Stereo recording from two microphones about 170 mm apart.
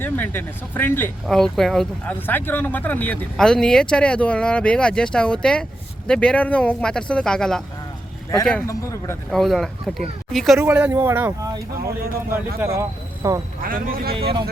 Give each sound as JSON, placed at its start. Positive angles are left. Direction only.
{"t": 0.0, "sound": "speech", "side_deg": 10}
{"t": 8.6, "sound": "speech", "side_deg": 20}
{"t": 9.3, "sound": "speech", "side_deg": 0}
{"t": 13.6, "sound": "a man's voice", "side_deg": -55}
{"t": 14.1, "sound": "speech", "side_deg": -35}